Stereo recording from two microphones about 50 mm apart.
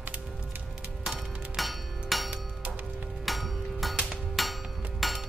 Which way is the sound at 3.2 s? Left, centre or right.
Centre.